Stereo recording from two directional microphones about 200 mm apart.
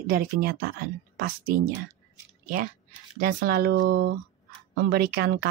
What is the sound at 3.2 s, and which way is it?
Speech, 45° right (ahead or behind).